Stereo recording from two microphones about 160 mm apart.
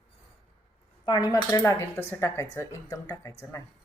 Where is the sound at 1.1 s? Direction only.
25° left (ahead or behind).